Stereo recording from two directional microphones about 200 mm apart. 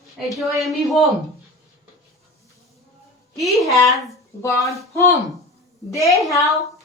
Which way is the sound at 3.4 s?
Centre (ahead or behind).